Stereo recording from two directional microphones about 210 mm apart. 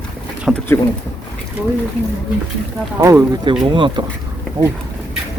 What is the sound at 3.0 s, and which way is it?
Speech, 15° right (ahead or behind).